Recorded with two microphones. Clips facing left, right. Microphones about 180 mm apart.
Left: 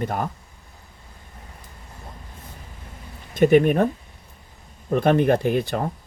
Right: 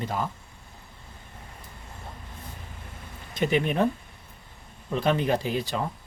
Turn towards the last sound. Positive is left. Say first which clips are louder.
# left 6 dB
turn(degrees=55)  # may be behind; listen again after turning